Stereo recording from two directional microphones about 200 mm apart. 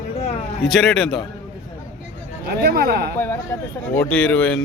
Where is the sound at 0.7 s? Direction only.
Centre (ahead or behind).